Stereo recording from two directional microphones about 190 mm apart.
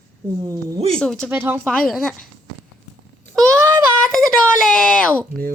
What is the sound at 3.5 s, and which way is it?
Child singing, 15° right (ahead or behind).